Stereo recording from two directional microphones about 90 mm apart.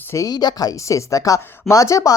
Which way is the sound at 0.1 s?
40° left (ahead or behind).